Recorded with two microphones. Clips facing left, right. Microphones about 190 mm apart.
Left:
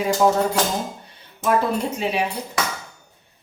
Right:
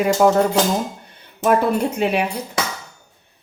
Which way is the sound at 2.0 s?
55° right (ahead or behind).